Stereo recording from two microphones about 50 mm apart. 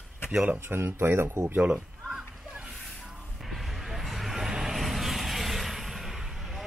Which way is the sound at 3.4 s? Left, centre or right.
Centre.